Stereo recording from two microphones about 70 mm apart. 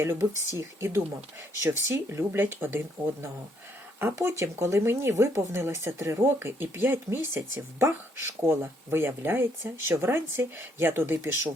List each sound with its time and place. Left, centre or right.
0.0 s speech: right
4.1 s speech: right